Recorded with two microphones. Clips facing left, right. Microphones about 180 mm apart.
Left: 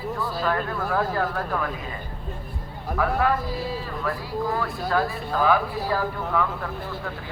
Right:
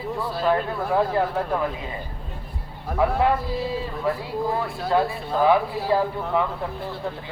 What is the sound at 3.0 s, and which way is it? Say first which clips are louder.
Speech: right 2 dB; 25° right (ahead or behind).